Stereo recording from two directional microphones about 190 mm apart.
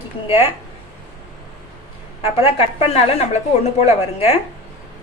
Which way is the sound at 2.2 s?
30° left (ahead or behind).